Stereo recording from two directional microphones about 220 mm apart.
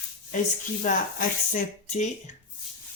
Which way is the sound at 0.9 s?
35° left (ahead or behind).